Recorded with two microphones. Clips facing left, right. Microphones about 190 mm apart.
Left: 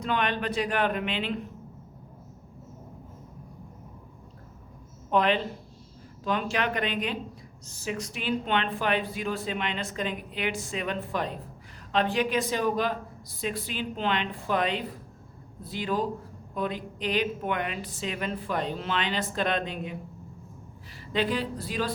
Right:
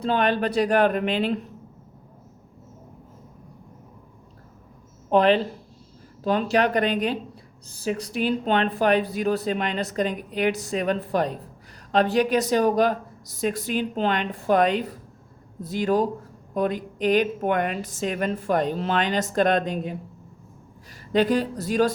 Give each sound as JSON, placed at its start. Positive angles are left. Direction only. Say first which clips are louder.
{"t": 0.0, "sound": "speech", "louder": "right 6 dB", "side_deg": -35}
{"t": 5.1, "sound": "a woman's voice", "louder": "right 6 dB", "side_deg": -35}
{"t": 21.1, "sound": "a woman's voice", "louder": "right 7 dB", "side_deg": -45}